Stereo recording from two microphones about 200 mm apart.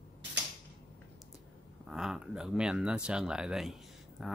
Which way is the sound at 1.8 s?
Centre (ahead or behind).